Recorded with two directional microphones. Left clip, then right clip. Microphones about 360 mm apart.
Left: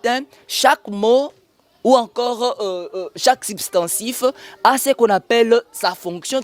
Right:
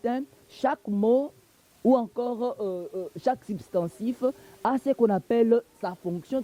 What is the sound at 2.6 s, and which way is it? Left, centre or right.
Speech, centre.